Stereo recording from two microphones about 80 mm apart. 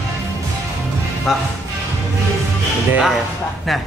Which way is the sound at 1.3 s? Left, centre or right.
Centre.